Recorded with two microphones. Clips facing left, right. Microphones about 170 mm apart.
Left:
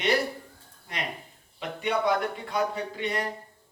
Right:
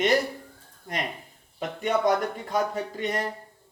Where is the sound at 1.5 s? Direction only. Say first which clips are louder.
Right 2 dB; 45° right (ahead or behind).